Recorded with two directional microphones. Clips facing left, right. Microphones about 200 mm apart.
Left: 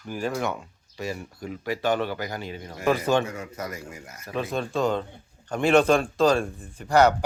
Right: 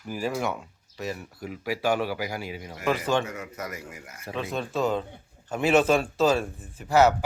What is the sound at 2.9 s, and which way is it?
Speech, 10° left (ahead or behind).